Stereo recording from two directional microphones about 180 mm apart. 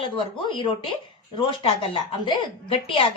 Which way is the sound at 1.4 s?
30° left (ahead or behind).